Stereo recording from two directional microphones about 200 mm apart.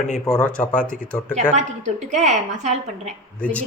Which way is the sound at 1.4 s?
35° right (ahead or behind).